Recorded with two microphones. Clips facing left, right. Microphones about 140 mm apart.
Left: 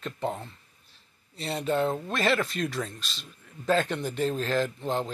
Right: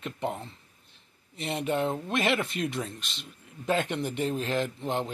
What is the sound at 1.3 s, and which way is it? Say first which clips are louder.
Speech: left 1 dB; 20° right (ahead or behind).